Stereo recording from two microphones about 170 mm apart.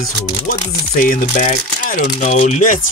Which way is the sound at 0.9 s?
55° left (ahead or behind).